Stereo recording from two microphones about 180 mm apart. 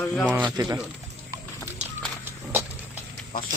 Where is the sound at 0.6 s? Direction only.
25° right (ahead or behind).